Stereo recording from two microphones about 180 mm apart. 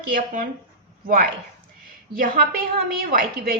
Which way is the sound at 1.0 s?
55° right (ahead or behind).